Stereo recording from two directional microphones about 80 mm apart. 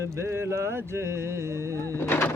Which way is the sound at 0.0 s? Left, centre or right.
Right.